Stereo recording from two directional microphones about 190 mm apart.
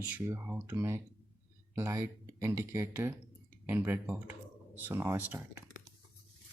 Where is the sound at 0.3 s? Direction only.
15° right (ahead or behind).